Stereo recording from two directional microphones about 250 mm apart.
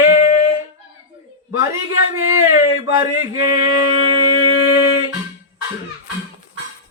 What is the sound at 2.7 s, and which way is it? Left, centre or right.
A man's voice, centre.